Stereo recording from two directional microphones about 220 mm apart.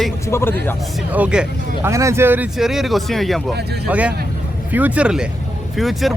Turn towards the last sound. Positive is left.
turn(degrees=0)  # may be behind; listen again after turning